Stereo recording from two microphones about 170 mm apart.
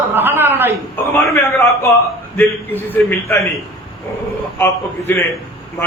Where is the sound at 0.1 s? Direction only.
15° right (ahead or behind).